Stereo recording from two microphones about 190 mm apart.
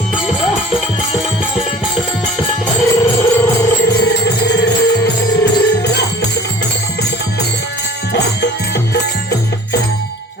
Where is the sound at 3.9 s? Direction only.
60° left (ahead or behind).